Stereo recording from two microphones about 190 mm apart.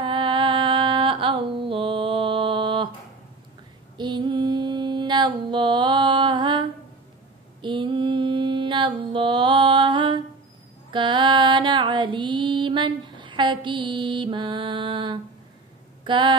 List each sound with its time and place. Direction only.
0.0 s music: 25° right (ahead or behind)
4.0 s mantra: 25° right (ahead or behind)
10.9 s female singing: 25° right (ahead or behind)
16.0 s speech: 25° right (ahead or behind)